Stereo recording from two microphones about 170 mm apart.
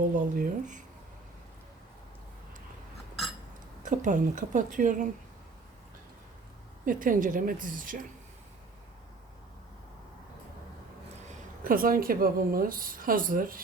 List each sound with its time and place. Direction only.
0.2 s a woman's voice: 50° right (ahead or behind)
3.8 s a woman's voice: 50° right (ahead or behind)
6.8 s a woman's voice: 50° right (ahead or behind)
11.6 s a woman's voice: 55° right (ahead or behind)